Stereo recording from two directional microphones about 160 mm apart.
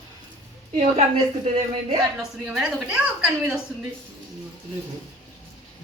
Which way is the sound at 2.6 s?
5° right (ahead or behind).